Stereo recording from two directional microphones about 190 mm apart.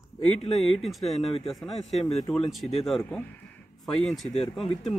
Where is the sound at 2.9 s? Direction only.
5° left (ahead or behind).